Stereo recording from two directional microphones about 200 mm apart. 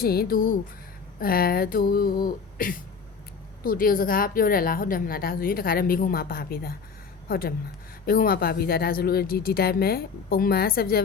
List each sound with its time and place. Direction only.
0.0 s a woman's voice: 50° left (ahead or behind)